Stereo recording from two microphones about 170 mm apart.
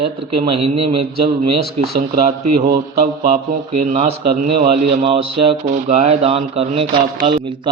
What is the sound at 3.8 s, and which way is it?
A man's voice, 45° right (ahead or behind).